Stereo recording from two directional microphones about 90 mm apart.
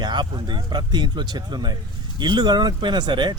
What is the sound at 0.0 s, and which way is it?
Speech, 55° right (ahead or behind).